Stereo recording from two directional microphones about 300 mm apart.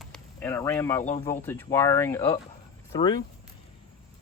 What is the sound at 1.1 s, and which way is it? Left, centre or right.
Speech, centre.